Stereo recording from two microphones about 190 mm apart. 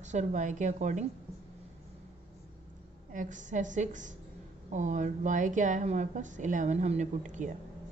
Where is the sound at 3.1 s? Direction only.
40° right (ahead or behind).